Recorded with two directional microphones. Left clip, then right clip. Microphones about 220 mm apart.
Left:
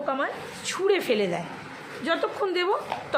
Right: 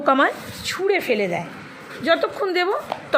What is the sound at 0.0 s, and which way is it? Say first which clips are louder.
Speech: right 10 dB; 35° right (ahead or behind).